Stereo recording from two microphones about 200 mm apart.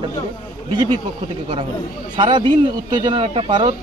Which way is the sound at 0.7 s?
20° right (ahead or behind).